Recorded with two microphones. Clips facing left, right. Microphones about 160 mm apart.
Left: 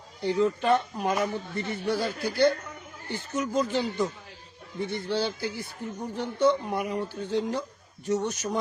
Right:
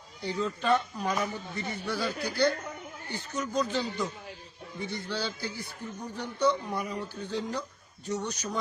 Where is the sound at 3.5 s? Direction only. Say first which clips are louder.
Left 2 dB; 25° left (ahead or behind).